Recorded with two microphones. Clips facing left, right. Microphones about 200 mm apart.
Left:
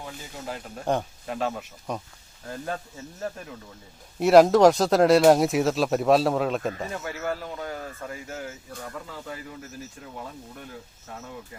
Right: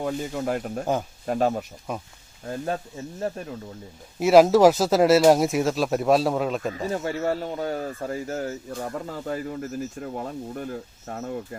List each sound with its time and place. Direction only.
0.0 s speech: 55° right (ahead or behind)
1.3 s speech: 45° right (ahead or behind)
1.9 s speech: 5° right (ahead or behind)
2.5 s speech: 30° right (ahead or behind)
4.2 s speech: centre (ahead or behind)
6.9 s speech: 30° right (ahead or behind); by 11.3 s 45° right (ahead or behind)